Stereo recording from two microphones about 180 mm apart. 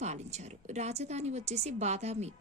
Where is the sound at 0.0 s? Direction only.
40° right (ahead or behind).